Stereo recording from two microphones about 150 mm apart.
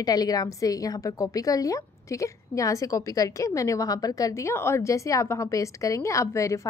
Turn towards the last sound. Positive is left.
turn(degrees=20)  # may be behind; listen again after turning